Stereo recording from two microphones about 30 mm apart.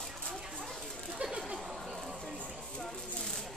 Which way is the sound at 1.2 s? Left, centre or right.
Right.